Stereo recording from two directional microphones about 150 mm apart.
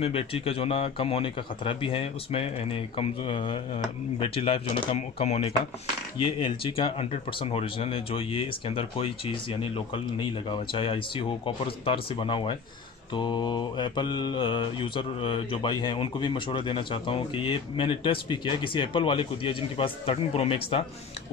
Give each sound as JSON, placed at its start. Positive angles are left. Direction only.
{"t": 0.0, "sound": "mantra", "side_deg": 40}
{"t": 6.3, "sound": "mantra", "side_deg": 35}